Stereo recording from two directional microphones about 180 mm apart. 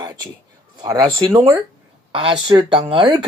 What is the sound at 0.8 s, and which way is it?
Speech, 20° right (ahead or behind).